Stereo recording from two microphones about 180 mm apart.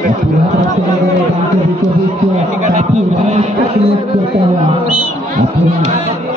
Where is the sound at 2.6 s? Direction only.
40° right (ahead or behind).